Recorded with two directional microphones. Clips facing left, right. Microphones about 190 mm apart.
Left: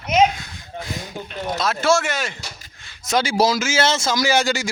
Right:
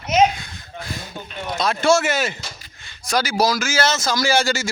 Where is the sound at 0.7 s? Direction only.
15° left (ahead or behind).